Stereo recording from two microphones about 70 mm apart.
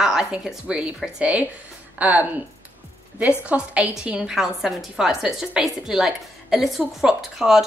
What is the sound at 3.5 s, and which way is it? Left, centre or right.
A woman's voice, centre.